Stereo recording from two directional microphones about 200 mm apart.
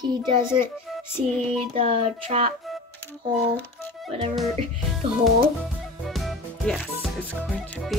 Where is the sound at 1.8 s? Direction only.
30° right (ahead or behind).